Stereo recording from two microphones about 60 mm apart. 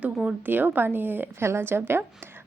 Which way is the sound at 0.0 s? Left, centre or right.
Centre.